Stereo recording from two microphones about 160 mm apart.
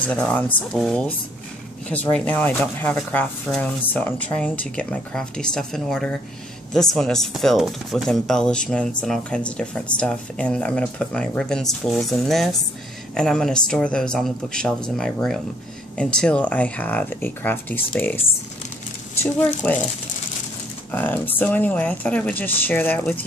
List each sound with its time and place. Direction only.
0.0 s speech: 10° left (ahead or behind)
2.1 s speech: 10° left (ahead or behind)
19.2 s speech: 10° left (ahead or behind)
20.9 s speech: 10° left (ahead or behind)